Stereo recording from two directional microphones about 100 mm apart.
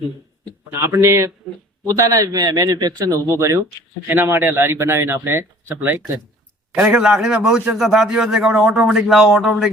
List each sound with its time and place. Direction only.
0.7 s speech: 25° right (ahead or behind)
2.0 s a man's voice: 40° right (ahead or behind)
3.2 s speech: 25° right (ahead or behind)
6.8 s a man's voice: 10° right (ahead or behind)